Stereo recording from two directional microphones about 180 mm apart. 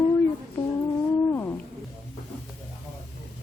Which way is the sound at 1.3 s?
10° left (ahead or behind).